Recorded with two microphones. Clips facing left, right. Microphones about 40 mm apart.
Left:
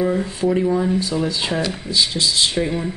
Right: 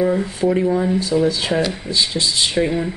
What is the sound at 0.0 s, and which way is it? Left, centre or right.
Speech, centre.